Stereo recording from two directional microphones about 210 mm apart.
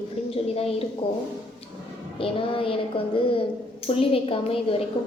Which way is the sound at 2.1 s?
25° left (ahead or behind).